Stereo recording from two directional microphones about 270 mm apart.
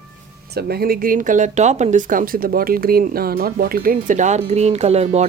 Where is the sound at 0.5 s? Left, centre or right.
Right.